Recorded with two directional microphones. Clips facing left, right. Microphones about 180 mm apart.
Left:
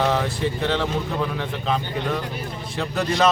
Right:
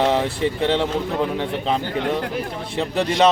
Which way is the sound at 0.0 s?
25° right (ahead or behind).